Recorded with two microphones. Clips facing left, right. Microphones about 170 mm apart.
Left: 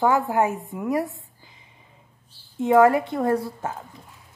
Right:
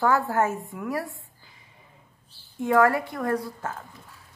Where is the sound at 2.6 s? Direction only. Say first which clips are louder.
Left 4 dB; 20° left (ahead or behind).